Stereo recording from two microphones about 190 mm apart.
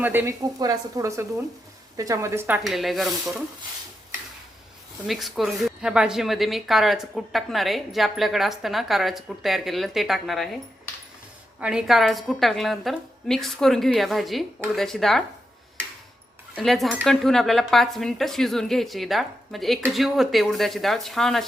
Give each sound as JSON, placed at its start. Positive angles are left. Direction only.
{"t": 0.0, "sound": "speech", "side_deg": -10}
{"t": 2.6, "sound": "a woman's voice", "side_deg": 0}
{"t": 5.0, "sound": "a woman's voice", "side_deg": 0}
{"t": 11.6, "sound": "a woman's voice", "side_deg": -5}
{"t": 16.6, "sound": "a woman's voice", "side_deg": 0}